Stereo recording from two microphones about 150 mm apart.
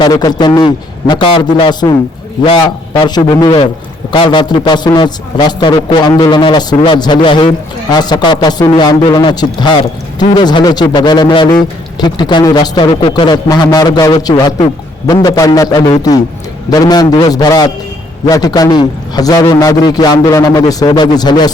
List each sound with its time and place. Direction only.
0.0 s a man's voice: 25° left (ahead or behind)